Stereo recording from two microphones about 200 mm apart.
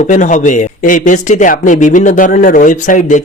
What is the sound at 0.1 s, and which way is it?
Speech, 40° left (ahead or behind).